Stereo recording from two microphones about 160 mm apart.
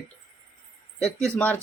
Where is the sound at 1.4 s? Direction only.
10° left (ahead or behind).